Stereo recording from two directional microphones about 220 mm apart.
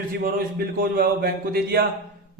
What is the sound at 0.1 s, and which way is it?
Speech, 45° right (ahead or behind).